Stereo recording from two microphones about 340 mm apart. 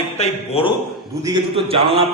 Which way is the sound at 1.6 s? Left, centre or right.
Centre.